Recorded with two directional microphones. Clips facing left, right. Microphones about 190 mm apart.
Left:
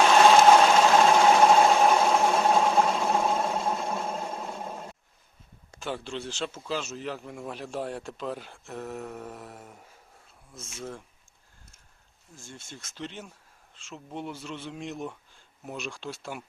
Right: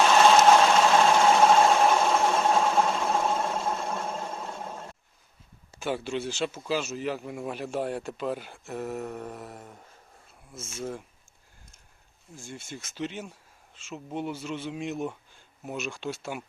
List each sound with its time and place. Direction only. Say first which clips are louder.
0.0 s vehicle: left 1 dB; 5° left (ahead or behind)
5.7 s speech: right 4 dB; 5° right (ahead or behind)
12.4 s speech: right 5 dB; 10° right (ahead or behind)